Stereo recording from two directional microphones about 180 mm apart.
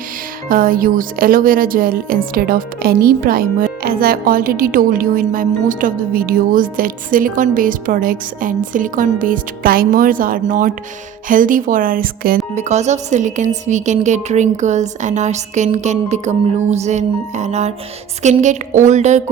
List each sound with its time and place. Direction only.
0.4 s speech: 50° right (ahead or behind)
12.5 s a woman's voice: 40° right (ahead or behind)